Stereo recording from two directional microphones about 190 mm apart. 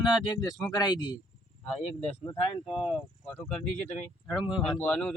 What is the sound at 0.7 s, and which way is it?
Speech, 20° left (ahead or behind).